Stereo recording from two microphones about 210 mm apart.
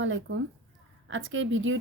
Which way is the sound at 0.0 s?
65° right (ahead or behind).